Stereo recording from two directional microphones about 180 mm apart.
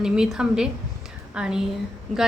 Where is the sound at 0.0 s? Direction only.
5° right (ahead or behind).